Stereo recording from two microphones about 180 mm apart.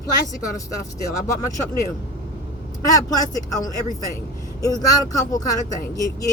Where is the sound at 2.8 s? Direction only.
20° left (ahead or behind).